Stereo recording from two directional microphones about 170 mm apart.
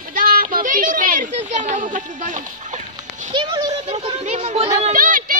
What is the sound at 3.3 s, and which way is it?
Speech, 25° right (ahead or behind).